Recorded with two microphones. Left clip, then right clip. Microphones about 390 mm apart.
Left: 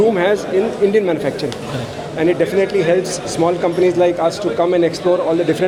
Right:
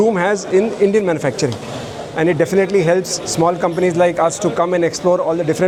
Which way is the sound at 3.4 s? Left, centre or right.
Right.